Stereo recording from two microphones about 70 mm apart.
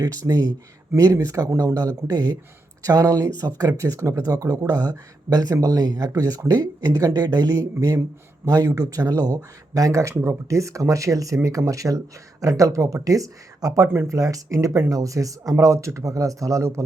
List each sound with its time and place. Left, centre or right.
0.3 s speech: right
0.9 s speech: right
13.8 s speech: right
14.2 s speech: right